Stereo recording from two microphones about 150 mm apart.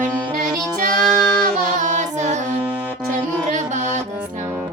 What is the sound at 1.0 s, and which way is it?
Child singing, 5° left (ahead or behind).